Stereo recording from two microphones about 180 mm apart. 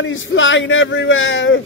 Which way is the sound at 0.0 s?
90° left.